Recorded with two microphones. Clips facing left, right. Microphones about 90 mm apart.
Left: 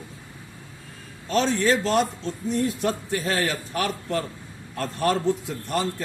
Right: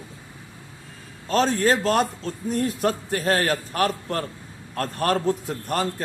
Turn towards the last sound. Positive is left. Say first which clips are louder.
# right 1 dB
turn(degrees=-45)  # may be behind; listen again after turning